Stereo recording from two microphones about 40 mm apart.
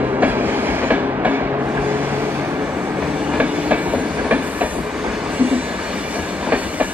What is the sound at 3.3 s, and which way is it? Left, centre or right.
Train, right.